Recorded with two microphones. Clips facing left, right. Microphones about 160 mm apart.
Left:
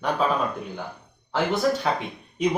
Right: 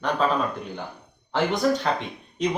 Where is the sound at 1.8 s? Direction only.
10° left (ahead or behind).